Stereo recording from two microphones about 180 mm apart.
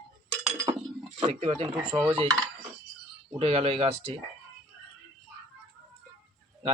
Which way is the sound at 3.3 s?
35° right (ahead or behind).